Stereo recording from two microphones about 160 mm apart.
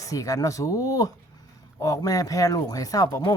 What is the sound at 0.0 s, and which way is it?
Speech, 20° left (ahead or behind).